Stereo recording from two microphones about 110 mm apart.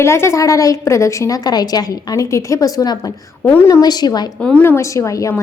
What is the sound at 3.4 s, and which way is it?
Speech, 20° left (ahead or behind).